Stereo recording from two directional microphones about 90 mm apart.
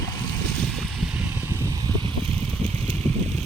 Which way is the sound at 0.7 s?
Centre (ahead or behind).